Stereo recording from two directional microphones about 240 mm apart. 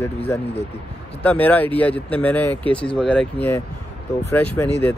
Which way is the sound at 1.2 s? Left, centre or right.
Centre.